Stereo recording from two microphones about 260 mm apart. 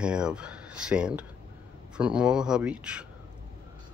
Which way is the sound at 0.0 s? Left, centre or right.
Centre.